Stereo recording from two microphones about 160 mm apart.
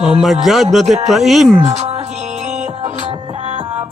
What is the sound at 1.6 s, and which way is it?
Speech, 40° right (ahead or behind).